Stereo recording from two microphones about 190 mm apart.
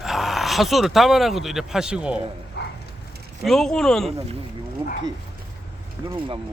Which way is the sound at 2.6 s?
60° left (ahead or behind).